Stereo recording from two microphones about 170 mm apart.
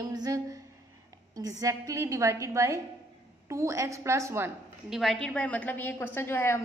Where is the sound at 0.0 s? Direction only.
20° right (ahead or behind).